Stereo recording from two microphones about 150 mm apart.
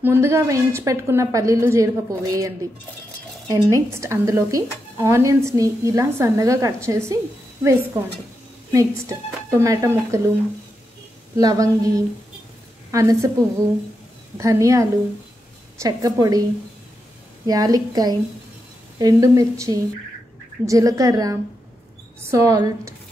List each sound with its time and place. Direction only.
0.0 s a woman's voice: 15° right (ahead or behind)
8.7 s a woman's voice: 20° right (ahead or behind)
11.3 s a woman's voice: 25° right (ahead or behind)
17.5 s a woman's voice: 25° right (ahead or behind)